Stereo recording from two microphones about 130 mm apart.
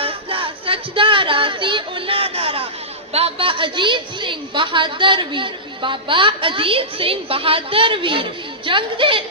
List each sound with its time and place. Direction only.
0.0 s music: 45° right (ahead or behind)
3.1 s a woman's voice: 50° right (ahead or behind)